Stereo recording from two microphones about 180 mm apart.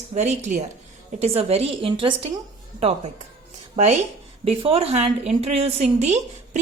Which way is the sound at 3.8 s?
35° right (ahead or behind).